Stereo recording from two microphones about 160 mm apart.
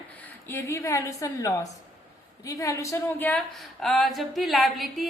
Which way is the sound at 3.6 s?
Centre (ahead or behind).